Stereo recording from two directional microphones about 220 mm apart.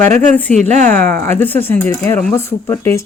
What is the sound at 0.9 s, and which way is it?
Speech, 10° left (ahead or behind).